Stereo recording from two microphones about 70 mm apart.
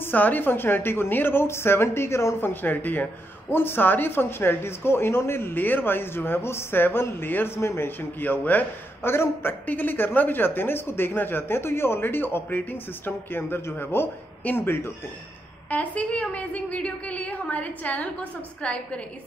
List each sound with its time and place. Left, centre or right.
0.0 s speech: left
2.5 s speech: left
15.7 s a woman's voice: left